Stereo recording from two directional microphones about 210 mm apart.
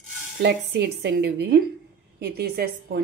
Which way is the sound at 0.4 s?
55° right (ahead or behind).